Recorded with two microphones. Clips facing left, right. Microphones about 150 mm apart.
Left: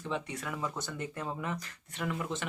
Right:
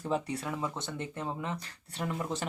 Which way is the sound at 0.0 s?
35° right (ahead or behind).